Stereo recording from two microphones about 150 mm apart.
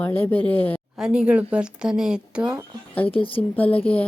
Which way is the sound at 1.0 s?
5° right (ahead or behind).